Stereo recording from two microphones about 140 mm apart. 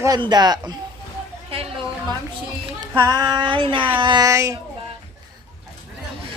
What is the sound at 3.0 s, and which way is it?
Child singing, 30° right (ahead or behind).